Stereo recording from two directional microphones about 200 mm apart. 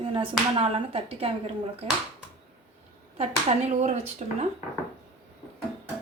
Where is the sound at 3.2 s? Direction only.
35° right (ahead or behind).